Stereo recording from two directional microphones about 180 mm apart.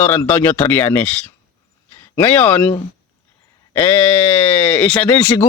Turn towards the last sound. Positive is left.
turn(degrees=15)  # may be behind; listen again after turning